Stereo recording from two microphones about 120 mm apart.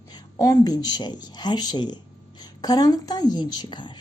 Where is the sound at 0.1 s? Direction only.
30° left (ahead or behind).